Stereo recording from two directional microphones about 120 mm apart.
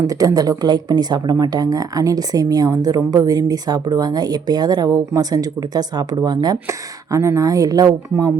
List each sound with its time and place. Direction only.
0.0 s speech: 30° right (ahead or behind)